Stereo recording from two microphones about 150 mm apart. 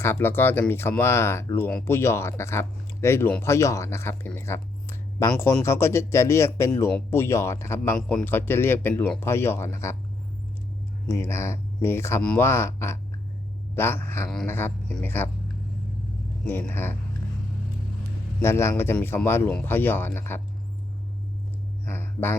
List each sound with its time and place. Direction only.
0.0 s speech: 15° left (ahead or behind)
4.3 s a sound: 15° left (ahead or behind)
5.6 s speech: 20° left (ahead or behind)
7.9 s speech: 10° left (ahead or behind)
11.0 s speech: 15° left (ahead or behind)
12.2 s speech: 5° left (ahead or behind)
12.5 s speech: 15° left (ahead or behind)
16.5 s speech: 15° left (ahead or behind)
18.4 s speech: 20° left (ahead or behind)
21.8 s a sound: 15° left (ahead or behind)